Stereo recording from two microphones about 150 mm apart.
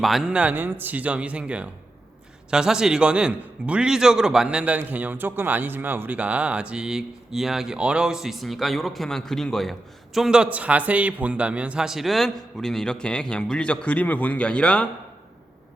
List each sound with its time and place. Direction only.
0.0 s a man's voice: centre (ahead or behind)